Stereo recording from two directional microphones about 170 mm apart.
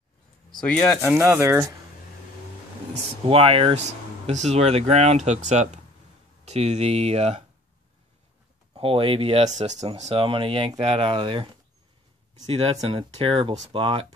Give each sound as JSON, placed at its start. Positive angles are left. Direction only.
{"t": 0.5, "sound": "speech", "side_deg": 5}
{"t": 1.0, "sound": "speech", "side_deg": -15}
{"t": 2.9, "sound": "speech", "side_deg": -35}
{"t": 8.7, "sound": "speech", "side_deg": -35}
{"t": 12.4, "sound": "speech", "side_deg": -35}